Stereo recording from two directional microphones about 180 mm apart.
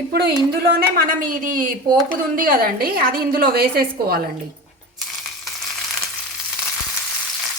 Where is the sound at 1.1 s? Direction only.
50° right (ahead or behind).